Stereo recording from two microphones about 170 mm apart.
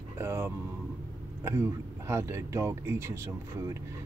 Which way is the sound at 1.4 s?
15° right (ahead or behind).